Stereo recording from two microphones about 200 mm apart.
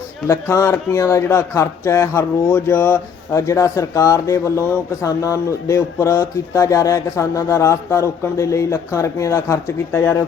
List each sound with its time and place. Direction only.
0.3 s speech: 15° left (ahead or behind)